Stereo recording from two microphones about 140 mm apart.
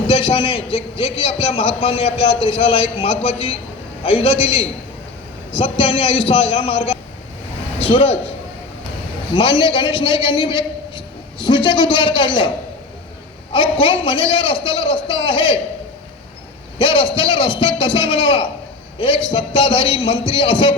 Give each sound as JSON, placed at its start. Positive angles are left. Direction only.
{"t": 0.1, "sound": "a man's voice", "side_deg": 40}
{"t": 9.3, "sound": "a man's voice", "side_deg": 35}
{"t": 16.7, "sound": "a man's voice", "side_deg": 35}